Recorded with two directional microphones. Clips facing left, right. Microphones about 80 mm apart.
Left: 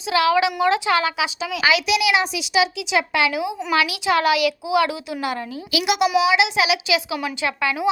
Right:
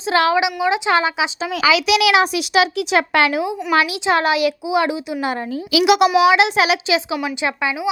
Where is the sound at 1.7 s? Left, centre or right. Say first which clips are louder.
Right 4 dB; right.